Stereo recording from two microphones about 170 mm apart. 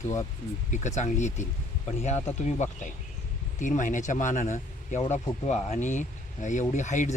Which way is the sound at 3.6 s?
50° left (ahead or behind).